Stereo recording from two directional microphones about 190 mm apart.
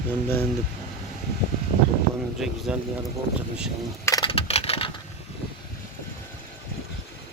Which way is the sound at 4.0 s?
15° left (ahead or behind).